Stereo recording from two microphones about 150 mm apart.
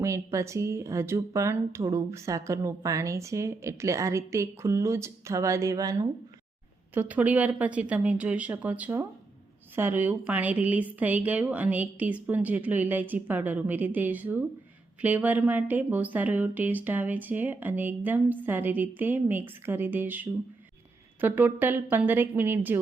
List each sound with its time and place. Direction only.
0.0 s speech: 20° right (ahead or behind)
6.9 s speech: 10° right (ahead or behind)